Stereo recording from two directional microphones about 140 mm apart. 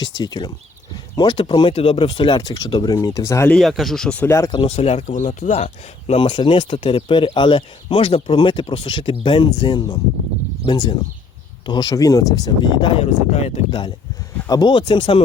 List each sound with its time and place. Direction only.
0.0 s speech: 30° left (ahead or behind)
3.5 s speech: centre (ahead or behind); by 4.5 s 20° left (ahead or behind)
4.7 s speech: 50° left (ahead or behind); by 12.9 s 30° left (ahead or behind)
13.0 s speech: 50° left (ahead or behind)
13.7 s speech: 35° left (ahead or behind)